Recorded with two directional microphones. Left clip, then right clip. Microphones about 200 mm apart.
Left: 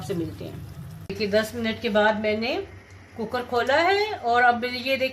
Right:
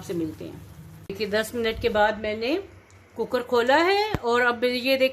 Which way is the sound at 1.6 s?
50° right (ahead or behind).